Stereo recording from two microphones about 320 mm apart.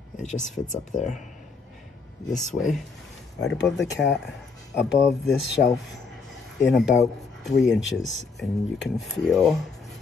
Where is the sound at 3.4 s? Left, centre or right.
Left.